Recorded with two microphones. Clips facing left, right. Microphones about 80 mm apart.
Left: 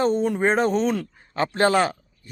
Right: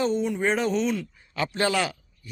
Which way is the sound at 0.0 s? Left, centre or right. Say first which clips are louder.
Left 4 dB; left.